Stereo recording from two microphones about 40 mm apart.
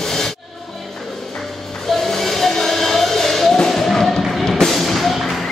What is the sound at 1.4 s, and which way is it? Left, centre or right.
Music, centre.